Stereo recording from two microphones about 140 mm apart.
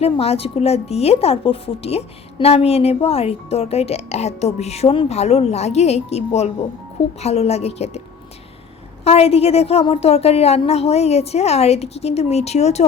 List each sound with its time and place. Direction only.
0.0 s a woman's voice: 45° left (ahead or behind)
9.0 s a woman's voice: 45° left (ahead or behind)